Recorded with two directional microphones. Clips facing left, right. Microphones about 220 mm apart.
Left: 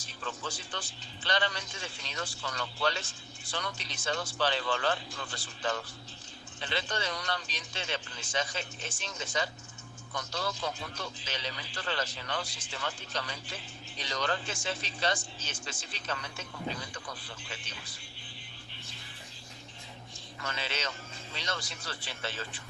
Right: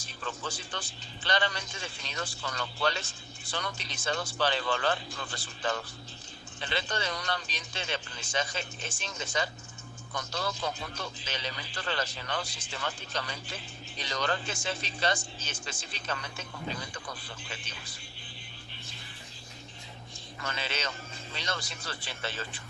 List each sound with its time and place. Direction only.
0.0 s a man's voice: 50° right (ahead or behind)
20.6 s a man's voice: 50° right (ahead or behind)